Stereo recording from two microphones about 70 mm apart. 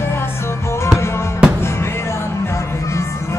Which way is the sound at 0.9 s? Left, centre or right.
Left.